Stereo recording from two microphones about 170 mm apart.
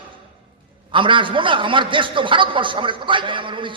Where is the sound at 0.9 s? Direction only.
30° right (ahead or behind).